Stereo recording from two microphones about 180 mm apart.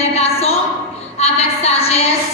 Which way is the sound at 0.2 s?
35° left (ahead or behind).